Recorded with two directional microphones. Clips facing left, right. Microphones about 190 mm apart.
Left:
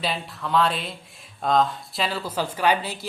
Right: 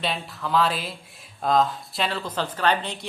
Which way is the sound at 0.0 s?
Centre (ahead or behind).